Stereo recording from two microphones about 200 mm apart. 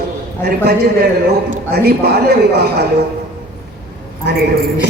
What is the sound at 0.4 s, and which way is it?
A man's voice, 55° right (ahead or behind).